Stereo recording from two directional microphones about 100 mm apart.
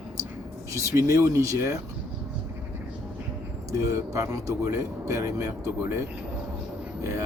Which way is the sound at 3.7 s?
30° right (ahead or behind).